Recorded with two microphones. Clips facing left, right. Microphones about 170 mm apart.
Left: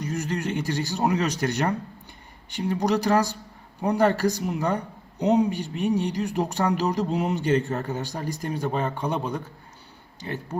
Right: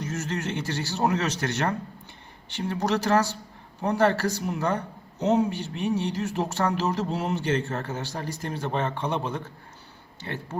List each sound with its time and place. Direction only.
0.0 s speech: 10° left (ahead or behind)